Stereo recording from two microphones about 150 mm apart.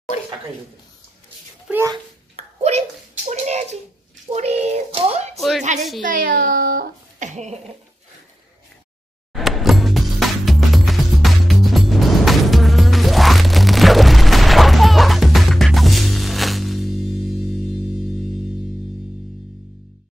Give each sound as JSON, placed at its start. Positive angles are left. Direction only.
{"t": 1.7, "sound": "speech", "side_deg": -5}
{"t": 2.3, "sound": "a sound", "side_deg": -45}
{"t": 5.3, "sound": "a sound", "side_deg": 0}
{"t": 5.6, "sound": "a woman's voice", "side_deg": -50}
{"t": 6.0, "sound": "a child's voice", "side_deg": -65}
{"t": 9.3, "sound": "music", "side_deg": 0}